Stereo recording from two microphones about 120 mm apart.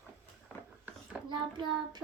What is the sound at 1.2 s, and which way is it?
Child singing, 5° right (ahead or behind).